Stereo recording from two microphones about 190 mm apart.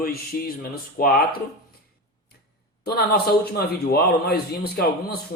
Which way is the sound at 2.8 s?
55° left (ahead or behind).